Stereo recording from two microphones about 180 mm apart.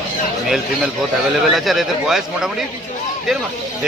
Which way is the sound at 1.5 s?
Centre (ahead or behind).